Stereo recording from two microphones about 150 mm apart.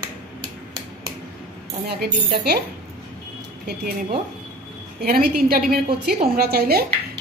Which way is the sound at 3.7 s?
70° right (ahead or behind).